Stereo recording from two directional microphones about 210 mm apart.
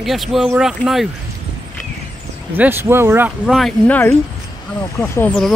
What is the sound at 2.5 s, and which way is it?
Speech, 10° right (ahead or behind).